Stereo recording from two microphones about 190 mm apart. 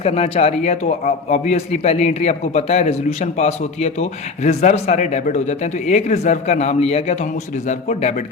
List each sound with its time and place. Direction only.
0.0 s a man's voice: 30° left (ahead or behind)